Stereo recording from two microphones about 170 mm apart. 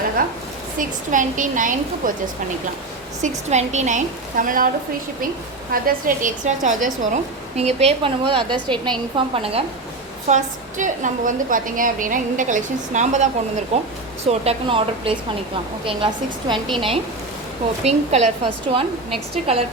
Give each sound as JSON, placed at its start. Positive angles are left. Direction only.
{"t": 0.2, "sound": "a woman's voice", "side_deg": -55}
{"t": 3.2, "sound": "a woman's voice", "side_deg": -45}
{"t": 5.7, "sound": "a woman's voice", "side_deg": -55}
{"t": 10.2, "sound": "a woman's voice", "side_deg": -45}
{"t": 16.7, "sound": "a woman's voice", "side_deg": -30}